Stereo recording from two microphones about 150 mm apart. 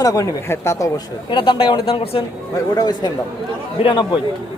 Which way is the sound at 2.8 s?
25° left (ahead or behind).